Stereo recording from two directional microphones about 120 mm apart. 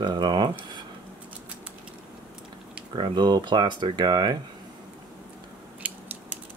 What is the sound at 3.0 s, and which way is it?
Speech, 35° right (ahead or behind).